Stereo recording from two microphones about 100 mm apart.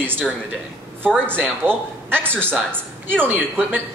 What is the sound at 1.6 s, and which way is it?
A woman's voice, 15° right (ahead or behind).